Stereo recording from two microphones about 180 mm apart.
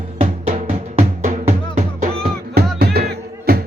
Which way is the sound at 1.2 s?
45° right (ahead or behind).